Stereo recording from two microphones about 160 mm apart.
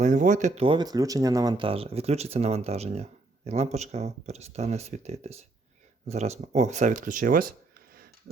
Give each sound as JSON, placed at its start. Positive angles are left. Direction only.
{"t": 0.0, "sound": "speech", "side_deg": -50}